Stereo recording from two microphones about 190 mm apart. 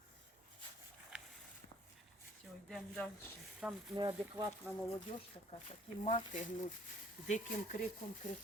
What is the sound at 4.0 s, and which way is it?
Speech, 15° right (ahead or behind).